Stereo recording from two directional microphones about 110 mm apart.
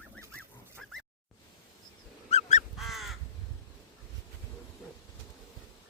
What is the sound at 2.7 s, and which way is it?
Crow, centre (ahead or behind).